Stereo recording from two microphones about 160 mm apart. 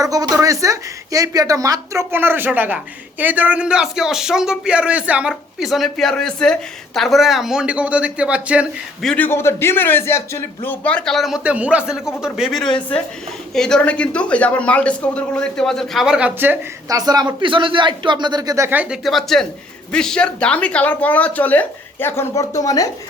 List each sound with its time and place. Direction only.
0.0 s a woman's voice: 20° right (ahead or behind); by 9.0 s 5° right (ahead or behind)
9.0 s a man's voice: 10° left (ahead or behind); by 17.0 s 10° right (ahead or behind)
17.0 s a man's voice: 25° right (ahead or behind); by 22.9 s 20° left (ahead or behind)